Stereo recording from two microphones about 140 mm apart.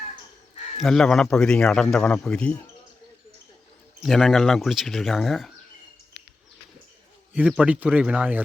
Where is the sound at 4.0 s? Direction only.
Centre (ahead or behind).